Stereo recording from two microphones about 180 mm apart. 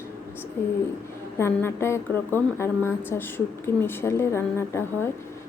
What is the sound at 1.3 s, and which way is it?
A woman's voice, 15° left (ahead or behind).